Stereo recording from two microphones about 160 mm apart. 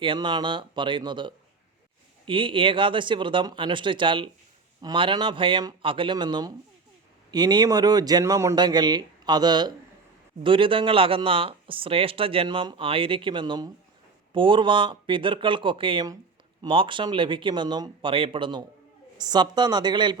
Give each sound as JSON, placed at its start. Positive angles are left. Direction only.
{"t": 0.0, "sound": "speech", "side_deg": -30}